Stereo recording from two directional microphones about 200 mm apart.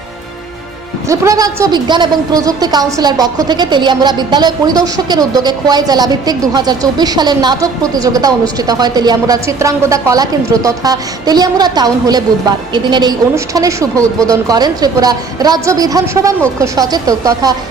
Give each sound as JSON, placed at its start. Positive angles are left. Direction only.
{"t": 1.0, "sound": "a woman's voice", "side_deg": -15}